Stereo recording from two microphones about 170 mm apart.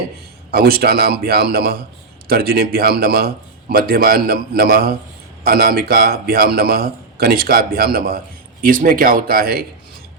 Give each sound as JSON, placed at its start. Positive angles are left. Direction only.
{"t": 0.5, "sound": "a man's voice", "side_deg": -60}